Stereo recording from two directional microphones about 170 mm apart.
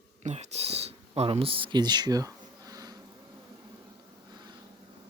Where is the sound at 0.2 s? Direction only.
40° right (ahead or behind); by 2.9 s 20° right (ahead or behind).